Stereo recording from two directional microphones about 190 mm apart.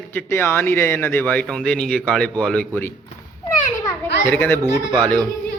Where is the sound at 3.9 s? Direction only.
10° left (ahead or behind).